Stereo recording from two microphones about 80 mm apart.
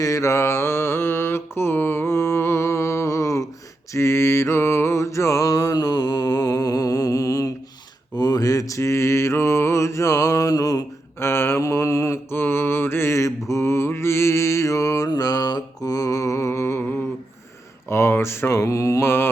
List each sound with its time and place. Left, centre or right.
0.0 s mantra: left
3.9 s music: left
8.1 s mantra: left
11.2 s mantra: left
15.1 s mantra: left
17.8 s mantra: left